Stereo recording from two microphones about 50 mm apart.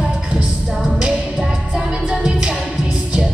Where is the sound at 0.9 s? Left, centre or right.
Centre.